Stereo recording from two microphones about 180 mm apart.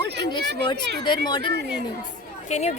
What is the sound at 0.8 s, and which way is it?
Speech, 70° right (ahead or behind).